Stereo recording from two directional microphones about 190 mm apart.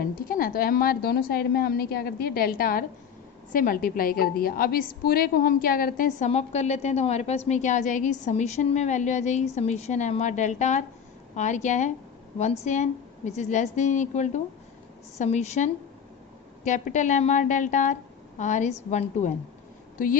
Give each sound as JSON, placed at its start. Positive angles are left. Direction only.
{"t": 0.0, "sound": "a woman's voice", "side_deg": 50}